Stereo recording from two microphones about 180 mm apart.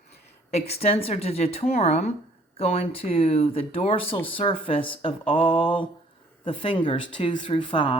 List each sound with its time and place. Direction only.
0.5 s speech: 35° left (ahead or behind)